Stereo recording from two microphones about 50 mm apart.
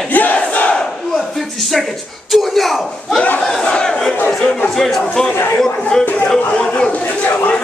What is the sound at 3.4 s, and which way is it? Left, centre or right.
Speech, centre.